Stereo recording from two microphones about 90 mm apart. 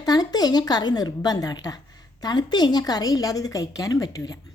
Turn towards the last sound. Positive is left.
turn(degrees=45)  # may be behind; listen again after turning